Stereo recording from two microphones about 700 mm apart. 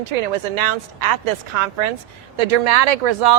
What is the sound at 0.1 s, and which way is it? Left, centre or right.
Speech, right.